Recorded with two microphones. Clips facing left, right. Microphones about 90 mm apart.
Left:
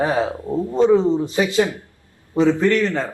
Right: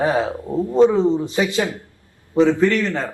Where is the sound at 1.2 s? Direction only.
25° right (ahead or behind).